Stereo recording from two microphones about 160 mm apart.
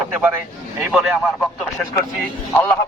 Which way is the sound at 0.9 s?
Centre (ahead or behind).